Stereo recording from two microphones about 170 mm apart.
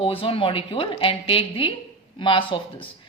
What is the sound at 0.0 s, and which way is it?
Speech, 30° left (ahead or behind).